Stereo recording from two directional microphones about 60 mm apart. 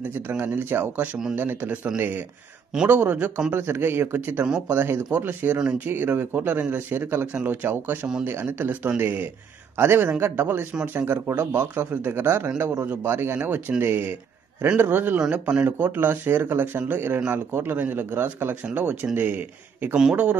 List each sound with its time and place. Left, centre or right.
0.3 s speech: right
1.3 s speech: right
3.5 s a man's voice: right
12.9 s speech: right
15.1 s speech: centre
15.6 s speech: right